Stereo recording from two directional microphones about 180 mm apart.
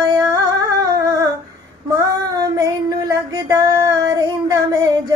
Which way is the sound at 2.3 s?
20° right (ahead or behind).